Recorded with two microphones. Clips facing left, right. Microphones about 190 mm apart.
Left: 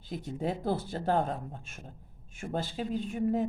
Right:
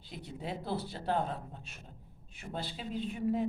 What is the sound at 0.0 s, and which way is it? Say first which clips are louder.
Speech: left 8 dB; 45° left (ahead or behind).